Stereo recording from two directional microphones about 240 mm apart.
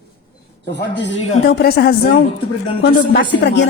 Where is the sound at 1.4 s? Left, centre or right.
Left.